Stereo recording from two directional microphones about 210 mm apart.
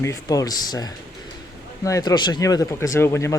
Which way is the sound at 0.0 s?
15° left (ahead or behind).